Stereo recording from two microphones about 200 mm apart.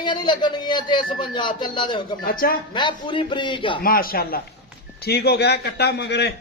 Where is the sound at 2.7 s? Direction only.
25° left (ahead or behind).